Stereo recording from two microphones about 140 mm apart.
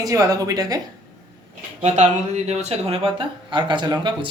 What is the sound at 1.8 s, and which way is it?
Speech, 55° right (ahead or behind).